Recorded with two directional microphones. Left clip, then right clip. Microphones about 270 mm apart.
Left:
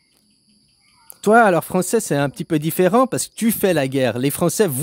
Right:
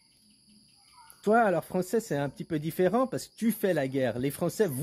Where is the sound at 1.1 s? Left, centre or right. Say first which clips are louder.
Left 11 dB; left.